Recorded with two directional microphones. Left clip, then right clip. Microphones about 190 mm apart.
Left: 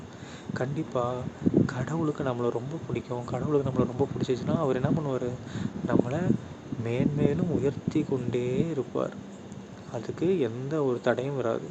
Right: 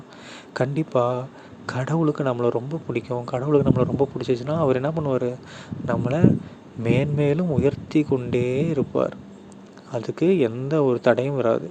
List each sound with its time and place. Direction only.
0.5 s speech: 40° right (ahead or behind)